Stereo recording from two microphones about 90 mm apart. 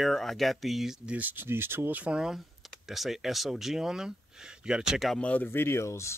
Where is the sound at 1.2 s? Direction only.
20° right (ahead or behind); by 5.2 s 5° right (ahead or behind).